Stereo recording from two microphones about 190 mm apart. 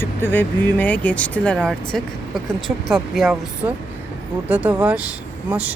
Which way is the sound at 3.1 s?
Centre (ahead or behind).